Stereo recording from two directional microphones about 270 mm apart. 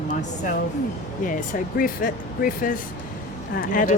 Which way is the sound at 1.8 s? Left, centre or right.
Left.